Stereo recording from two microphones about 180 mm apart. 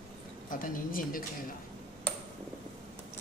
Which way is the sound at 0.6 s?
50° left (ahead or behind).